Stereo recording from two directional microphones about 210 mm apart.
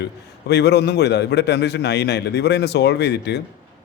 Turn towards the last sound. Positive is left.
turn(degrees=50)  # may be behind; listen again after turning